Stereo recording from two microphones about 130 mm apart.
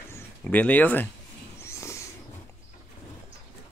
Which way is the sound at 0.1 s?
15° left (ahead or behind).